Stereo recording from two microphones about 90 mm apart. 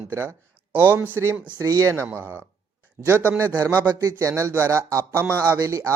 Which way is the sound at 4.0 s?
35° right (ahead or behind).